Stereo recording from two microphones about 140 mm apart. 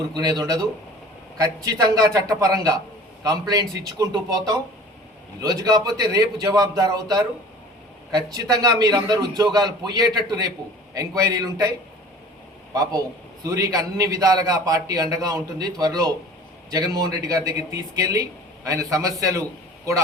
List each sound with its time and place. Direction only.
0.1 s a man's voice: 30° right (ahead or behind)
12.7 s a man's voice: 25° right (ahead or behind)